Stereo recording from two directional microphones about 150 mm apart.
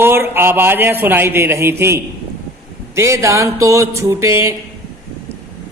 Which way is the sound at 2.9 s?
20° right (ahead or behind).